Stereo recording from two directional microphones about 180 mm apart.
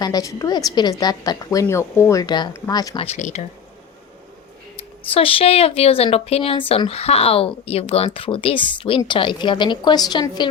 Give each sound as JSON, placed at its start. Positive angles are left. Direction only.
{"t": 0.0, "sound": "a woman's voice", "side_deg": 20}
{"t": 5.1, "sound": "speech", "side_deg": 30}